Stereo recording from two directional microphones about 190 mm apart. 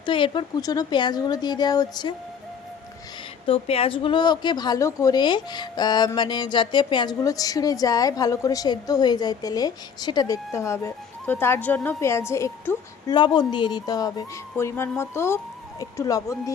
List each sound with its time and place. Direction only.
0.0 s a woman's voice: 25° left (ahead or behind)
3.4 s a woman's voice: 30° left (ahead or behind)